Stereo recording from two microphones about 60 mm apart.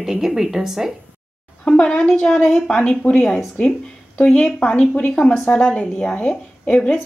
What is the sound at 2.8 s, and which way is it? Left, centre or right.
Speech, left.